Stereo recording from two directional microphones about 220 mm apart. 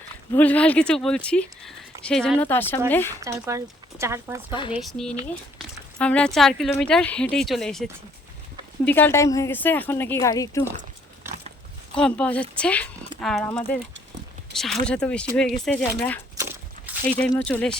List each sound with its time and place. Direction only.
0.3 s speech: 5° left (ahead or behind)
3.2 s speech: 15° right (ahead or behind)
4.7 s a woman's voice: centre (ahead or behind)
11.3 s a sound: 10° right (ahead or behind)
11.9 s a woman's voice: 5° left (ahead or behind)
16.4 s a sound: 10° right (ahead or behind)
17.1 s a woman's voice: 5° left (ahead or behind)